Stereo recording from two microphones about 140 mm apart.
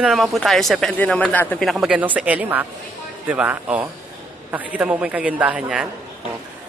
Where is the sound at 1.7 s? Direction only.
5° right (ahead or behind).